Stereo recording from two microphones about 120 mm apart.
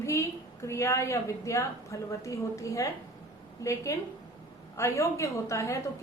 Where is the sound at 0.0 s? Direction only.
25° left (ahead or behind).